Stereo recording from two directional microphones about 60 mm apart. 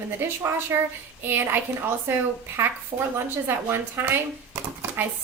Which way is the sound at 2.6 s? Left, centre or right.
Right.